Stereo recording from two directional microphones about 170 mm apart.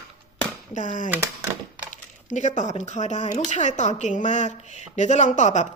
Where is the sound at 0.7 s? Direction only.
50° left (ahead or behind).